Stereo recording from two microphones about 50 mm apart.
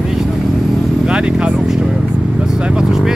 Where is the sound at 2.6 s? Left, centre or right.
Centre.